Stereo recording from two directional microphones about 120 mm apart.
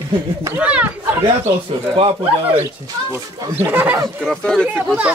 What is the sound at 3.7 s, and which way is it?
Speech, 10° right (ahead or behind).